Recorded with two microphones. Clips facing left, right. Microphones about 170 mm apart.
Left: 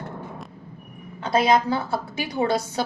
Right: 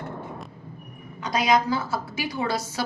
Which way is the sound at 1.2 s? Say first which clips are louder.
Left 3 dB; 30° left (ahead or behind).